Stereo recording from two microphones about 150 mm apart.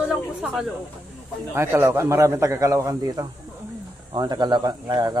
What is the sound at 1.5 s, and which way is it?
A man's voice, 15° right (ahead or behind).